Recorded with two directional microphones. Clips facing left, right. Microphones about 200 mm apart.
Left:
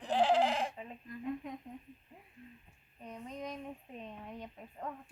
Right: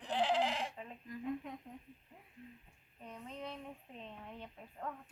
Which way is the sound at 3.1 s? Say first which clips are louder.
Left 3 dB; 15° left (ahead or behind).